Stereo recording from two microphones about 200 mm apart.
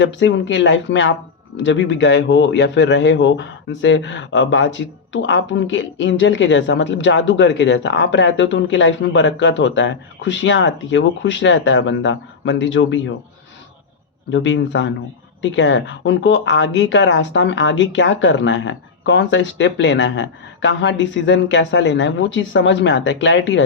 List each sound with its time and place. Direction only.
0.0 s a man's voice: 65° left (ahead or behind)
14.3 s a man's voice: 70° left (ahead or behind)